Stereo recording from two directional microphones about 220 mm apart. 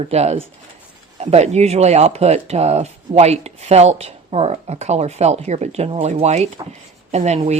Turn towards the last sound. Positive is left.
turn(degrees=-30)  # may be behind; listen again after turning